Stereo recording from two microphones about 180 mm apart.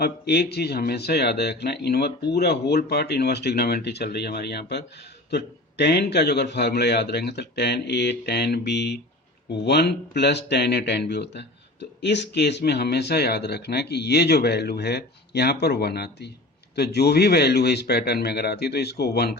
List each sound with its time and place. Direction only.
0.0 s speech: 60° left (ahead or behind)